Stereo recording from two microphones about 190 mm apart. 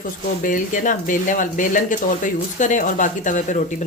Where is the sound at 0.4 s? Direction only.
45° left (ahead or behind).